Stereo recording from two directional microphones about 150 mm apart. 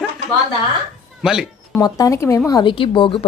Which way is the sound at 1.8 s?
25° left (ahead or behind).